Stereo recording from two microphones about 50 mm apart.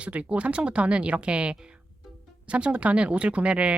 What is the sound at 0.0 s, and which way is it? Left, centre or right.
Speech, right.